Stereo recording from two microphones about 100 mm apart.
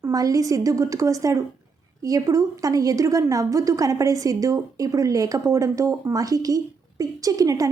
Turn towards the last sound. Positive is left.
turn(degrees=-35)  # may be behind; listen again after turning